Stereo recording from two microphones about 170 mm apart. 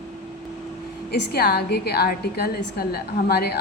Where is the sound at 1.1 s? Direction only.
70° left (ahead or behind).